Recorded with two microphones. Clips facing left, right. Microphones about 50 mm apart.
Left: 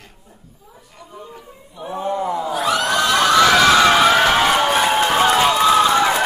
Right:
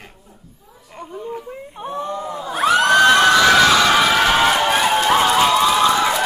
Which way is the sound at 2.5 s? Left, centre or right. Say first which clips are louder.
Right 7 dB; right.